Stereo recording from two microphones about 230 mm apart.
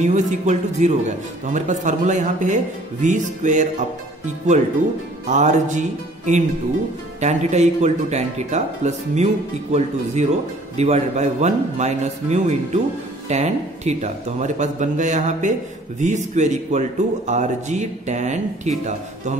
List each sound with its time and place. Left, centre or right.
0.0 s speech: right
5.3 s speech: right